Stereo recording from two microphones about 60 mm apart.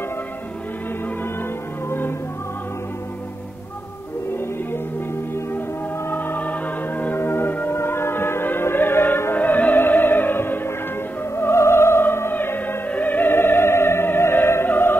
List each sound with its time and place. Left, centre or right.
1.9 s music: left
6.0 s music: left
7.2 s music: left
11.3 s opera: left